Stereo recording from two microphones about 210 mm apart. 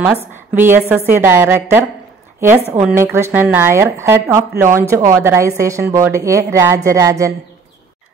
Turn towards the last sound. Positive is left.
turn(degrees=-15)  # may be behind; listen again after turning